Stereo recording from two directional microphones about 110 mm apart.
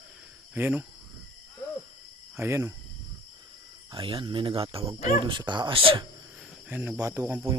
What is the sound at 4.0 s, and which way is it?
Speech, 50° right (ahead or behind).